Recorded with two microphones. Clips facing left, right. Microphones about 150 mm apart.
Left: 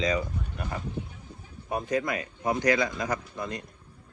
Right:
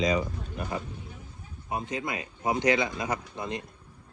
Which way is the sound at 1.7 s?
25° right (ahead or behind).